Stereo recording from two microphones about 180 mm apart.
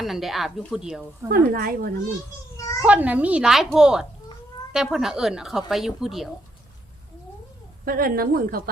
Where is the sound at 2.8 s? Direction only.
10° right (ahead or behind).